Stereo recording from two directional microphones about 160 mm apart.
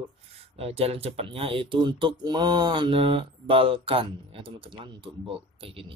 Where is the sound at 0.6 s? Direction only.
40° right (ahead or behind).